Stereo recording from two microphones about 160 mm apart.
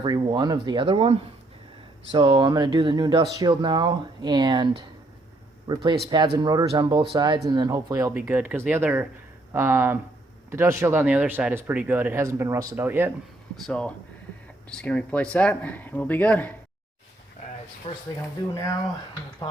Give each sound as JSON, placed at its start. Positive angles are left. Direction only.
{"t": 0.0, "sound": "speech", "side_deg": -25}
{"t": 13.7, "sound": "speech", "side_deg": 5}
{"t": 17.8, "sound": "speech", "side_deg": 40}
{"t": 18.5, "sound": "speech", "side_deg": 20}